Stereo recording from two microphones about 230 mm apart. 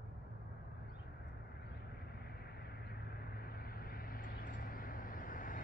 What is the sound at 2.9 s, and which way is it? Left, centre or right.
Vehicle, left.